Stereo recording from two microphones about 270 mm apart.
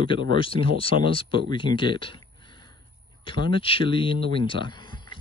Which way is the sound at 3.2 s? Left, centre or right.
Centre.